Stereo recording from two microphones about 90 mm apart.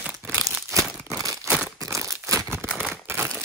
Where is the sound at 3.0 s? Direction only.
30° right (ahead or behind).